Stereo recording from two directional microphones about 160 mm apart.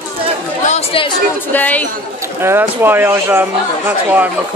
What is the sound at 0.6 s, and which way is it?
Speech, 40° left (ahead or behind).